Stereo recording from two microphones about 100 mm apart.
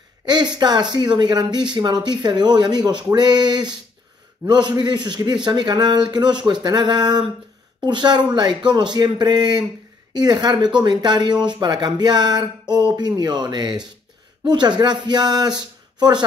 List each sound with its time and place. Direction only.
0.2 s speech: 45° right (ahead or behind)